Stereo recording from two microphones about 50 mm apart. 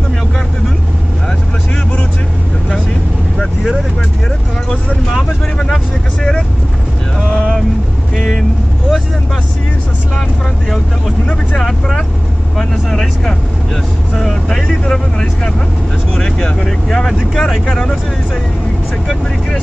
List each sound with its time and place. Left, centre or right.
4.6 s vehicle: centre
8.2 s vehicle: centre
11.5 s vehicle: centre
17.4 s speech: centre